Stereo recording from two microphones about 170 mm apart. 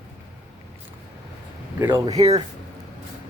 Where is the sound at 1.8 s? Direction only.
15° right (ahead or behind).